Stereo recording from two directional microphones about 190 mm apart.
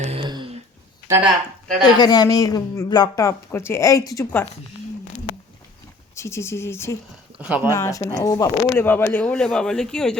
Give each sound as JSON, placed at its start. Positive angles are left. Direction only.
{"t": 0.0, "sound": "a sound", "side_deg": -30}
{"t": 1.0, "sound": "speech", "side_deg": -15}
{"t": 2.0, "sound": "speech", "side_deg": 20}
{"t": 6.1, "sound": "speech", "side_deg": 15}
{"t": 7.3, "sound": "speech", "side_deg": -5}
{"t": 7.7, "sound": "speech", "side_deg": 15}